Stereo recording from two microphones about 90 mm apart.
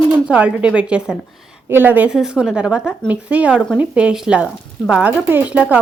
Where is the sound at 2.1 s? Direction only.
5° right (ahead or behind).